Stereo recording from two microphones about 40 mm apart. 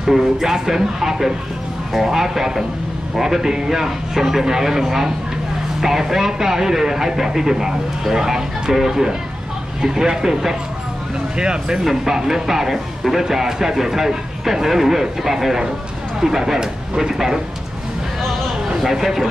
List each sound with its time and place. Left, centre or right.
0.0 s speech: centre
18.8 s speech: centre